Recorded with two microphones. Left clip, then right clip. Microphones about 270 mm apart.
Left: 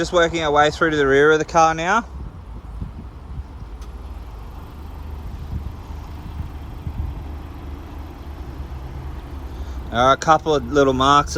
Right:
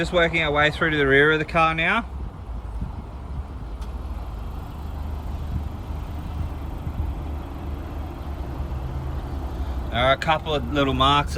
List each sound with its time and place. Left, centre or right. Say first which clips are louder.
0.0 s speech: left 3 dB; centre
10.0 s speech: left 5 dB; centre